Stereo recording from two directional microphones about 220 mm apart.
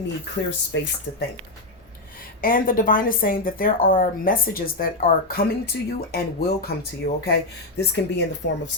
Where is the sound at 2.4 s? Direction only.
40° left (ahead or behind).